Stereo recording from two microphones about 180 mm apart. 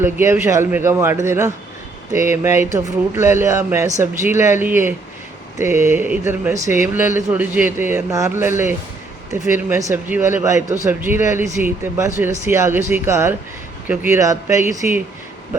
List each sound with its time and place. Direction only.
0.0 s speech: 15° right (ahead or behind)